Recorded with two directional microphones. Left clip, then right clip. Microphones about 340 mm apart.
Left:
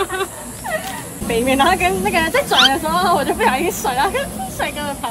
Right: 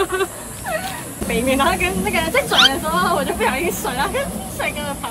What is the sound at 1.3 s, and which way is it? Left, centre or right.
Speech, left.